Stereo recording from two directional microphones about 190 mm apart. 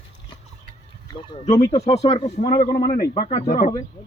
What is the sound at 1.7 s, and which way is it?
Speech, 35° left (ahead or behind).